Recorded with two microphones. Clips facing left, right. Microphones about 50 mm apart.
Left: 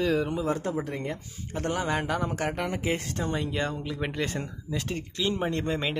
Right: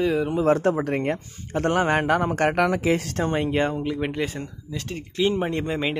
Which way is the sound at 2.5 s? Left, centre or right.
Right.